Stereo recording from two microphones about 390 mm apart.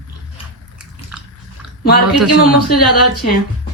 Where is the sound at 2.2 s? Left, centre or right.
Left.